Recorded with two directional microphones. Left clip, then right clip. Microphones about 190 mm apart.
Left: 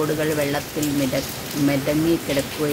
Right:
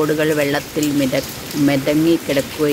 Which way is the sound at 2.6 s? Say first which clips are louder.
Right 8 dB; 40° right (ahead or behind).